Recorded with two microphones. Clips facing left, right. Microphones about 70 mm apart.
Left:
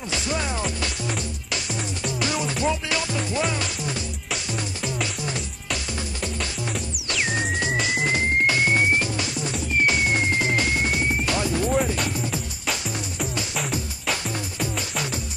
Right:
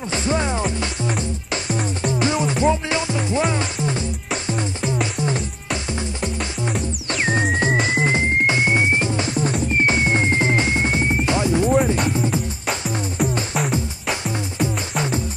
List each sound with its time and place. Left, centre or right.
0.1 s music: right
7.1 s music: right
14.6 s music: right